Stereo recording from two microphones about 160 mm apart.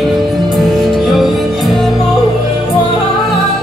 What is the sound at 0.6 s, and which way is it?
Music, centre (ahead or behind).